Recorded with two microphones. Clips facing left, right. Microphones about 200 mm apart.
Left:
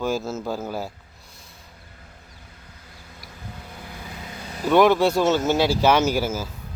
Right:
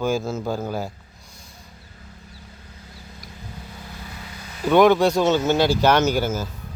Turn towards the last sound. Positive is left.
turn(degrees=5)  # may be behind; listen again after turning